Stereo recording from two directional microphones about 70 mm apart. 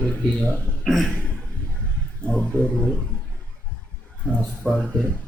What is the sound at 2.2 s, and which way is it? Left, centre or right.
Speech, centre.